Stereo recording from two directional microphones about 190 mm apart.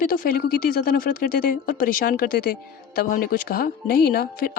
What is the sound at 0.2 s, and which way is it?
Speech, 50° left (ahead or behind).